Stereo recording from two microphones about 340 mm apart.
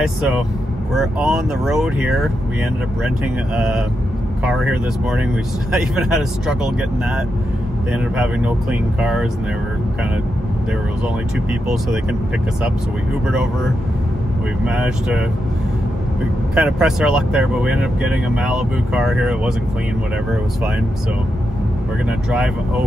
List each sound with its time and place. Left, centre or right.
0.0 s speech: centre
3.5 s speech: centre
7.9 s speech: centre
14.6 s speech: centre
16.5 s speech: centre